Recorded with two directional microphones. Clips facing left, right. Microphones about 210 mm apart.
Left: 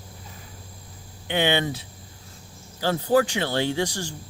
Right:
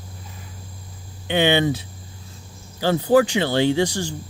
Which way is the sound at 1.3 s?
25° right (ahead or behind).